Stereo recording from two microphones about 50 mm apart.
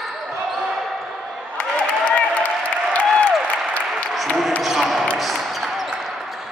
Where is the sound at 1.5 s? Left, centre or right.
Left.